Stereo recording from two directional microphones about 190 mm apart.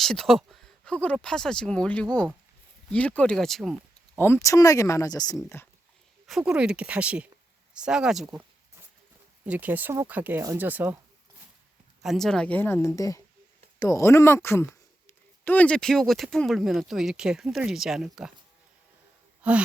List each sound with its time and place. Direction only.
0.0 s speech: centre (ahead or behind)
4.2 s speech: 15° left (ahead or behind)
6.2 s speech: centre (ahead or behind)
9.5 s speech: 10° right (ahead or behind)
12.0 s speech: centre (ahead or behind)
19.4 s speech: 5° right (ahead or behind)